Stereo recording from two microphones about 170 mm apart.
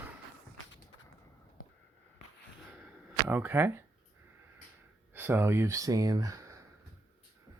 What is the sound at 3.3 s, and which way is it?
Speech, 10° right (ahead or behind).